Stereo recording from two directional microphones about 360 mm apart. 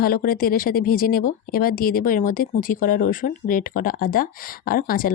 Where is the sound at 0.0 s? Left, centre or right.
Left.